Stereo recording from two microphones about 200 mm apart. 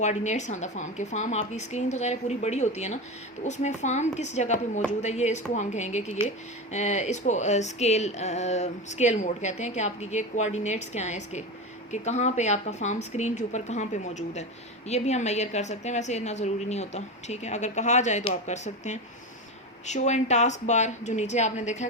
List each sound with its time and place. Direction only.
0.0 s speech: 35° left (ahead or behind)